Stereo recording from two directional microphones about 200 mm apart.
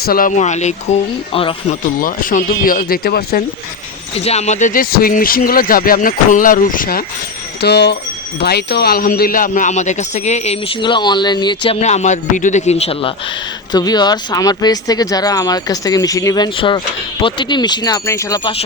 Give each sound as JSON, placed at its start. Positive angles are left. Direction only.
{"t": 0.0, "sound": "speech", "side_deg": 45}
{"t": 2.0, "sound": "speech", "side_deg": 45}
{"t": 4.2, "sound": "speech", "side_deg": 30}
{"t": 7.6, "sound": "speech", "side_deg": 55}